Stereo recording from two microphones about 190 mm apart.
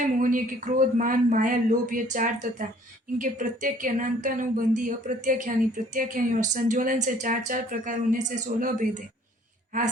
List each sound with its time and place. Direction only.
0.0 s speech: 45° right (ahead or behind)